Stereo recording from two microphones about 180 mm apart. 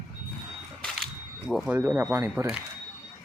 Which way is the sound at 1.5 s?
5° right (ahead or behind).